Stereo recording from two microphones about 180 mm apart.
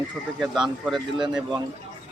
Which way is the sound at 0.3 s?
Centre (ahead or behind).